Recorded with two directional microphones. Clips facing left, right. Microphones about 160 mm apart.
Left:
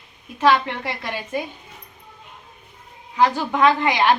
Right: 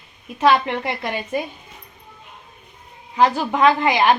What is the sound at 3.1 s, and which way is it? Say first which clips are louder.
Speech: right 1 dB; 20° right (ahead or behind).